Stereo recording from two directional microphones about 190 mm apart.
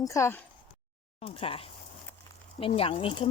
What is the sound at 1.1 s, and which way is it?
Speech, 30° left (ahead or behind).